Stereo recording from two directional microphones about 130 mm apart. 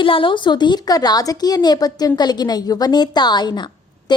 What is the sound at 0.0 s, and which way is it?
A woman's voice, 40° left (ahead or behind).